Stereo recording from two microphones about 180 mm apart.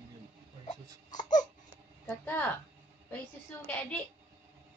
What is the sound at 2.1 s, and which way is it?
A woman's voice, 10° left (ahead or behind).